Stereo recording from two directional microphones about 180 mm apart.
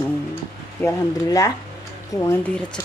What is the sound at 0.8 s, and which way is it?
Speech, 15° left (ahead or behind).